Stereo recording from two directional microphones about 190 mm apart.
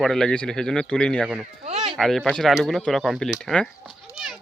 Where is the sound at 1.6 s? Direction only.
35° right (ahead or behind).